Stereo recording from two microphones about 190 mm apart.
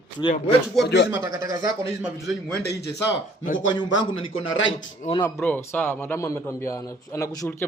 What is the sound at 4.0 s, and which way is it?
Speech, 30° left (ahead or behind).